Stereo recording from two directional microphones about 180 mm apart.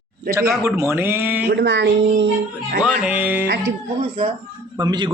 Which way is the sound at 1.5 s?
85° right.